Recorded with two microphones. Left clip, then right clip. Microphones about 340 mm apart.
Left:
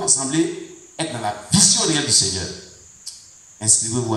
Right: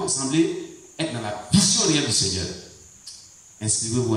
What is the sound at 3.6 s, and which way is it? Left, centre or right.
Speech, centre.